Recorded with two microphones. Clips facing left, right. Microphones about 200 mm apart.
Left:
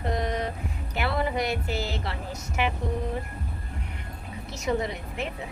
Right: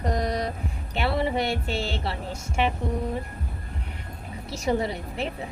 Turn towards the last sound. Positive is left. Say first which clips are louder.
# right 2 dB
turn(degrees=-35)  # may be behind; listen again after turning